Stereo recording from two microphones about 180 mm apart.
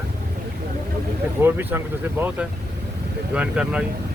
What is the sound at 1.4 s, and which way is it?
Speech, 10° right (ahead or behind).